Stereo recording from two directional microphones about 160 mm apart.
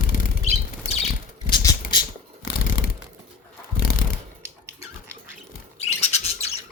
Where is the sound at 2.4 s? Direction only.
65° left (ahead or behind).